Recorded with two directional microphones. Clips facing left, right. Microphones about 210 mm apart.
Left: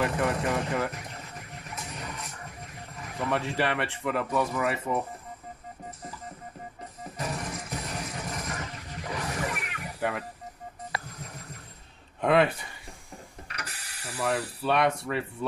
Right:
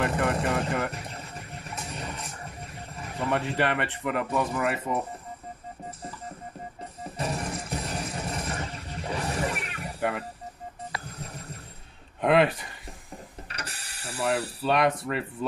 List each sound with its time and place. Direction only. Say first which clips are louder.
0.0 s speech: right 1 dB; centre (ahead or behind)
0.9 s music: right 2 dB; 30° right (ahead or behind)
3.0 s a sound: right 1 dB; 30° right (ahead or behind)
3.3 s speech: right 1 dB; centre (ahead or behind)
7.2 s music: right 3 dB; 30° right (ahead or behind)
9.9 s speech: right 1 dB; centre (ahead or behind)
12.2 s speech: right 1 dB; centre (ahead or behind)
13.6 s mechanisms: right 2 dB; 30° right (ahead or behind)
14.2 s speech: right 2 dB; centre (ahead or behind)